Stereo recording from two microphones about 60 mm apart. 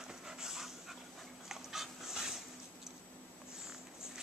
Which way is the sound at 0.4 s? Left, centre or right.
Centre.